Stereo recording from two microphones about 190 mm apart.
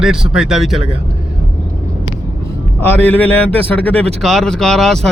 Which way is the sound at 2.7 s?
10° left (ahead or behind).